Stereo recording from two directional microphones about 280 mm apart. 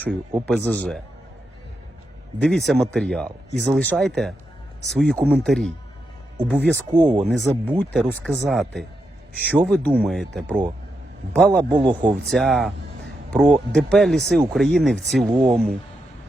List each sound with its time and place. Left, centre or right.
0.3 s speech: centre
2.4 s speech: centre
6.9 s speech: centre
7.3 s speech: centre
11.7 s speech: centre
12.3 s speech: centre